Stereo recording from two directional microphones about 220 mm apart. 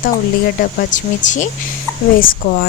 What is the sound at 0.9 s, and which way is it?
Speech, 35° left (ahead or behind).